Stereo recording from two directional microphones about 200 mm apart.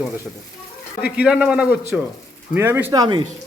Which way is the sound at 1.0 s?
5° right (ahead or behind).